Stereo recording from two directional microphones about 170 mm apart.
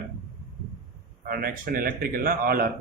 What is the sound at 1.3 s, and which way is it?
Speech, 60° right (ahead or behind).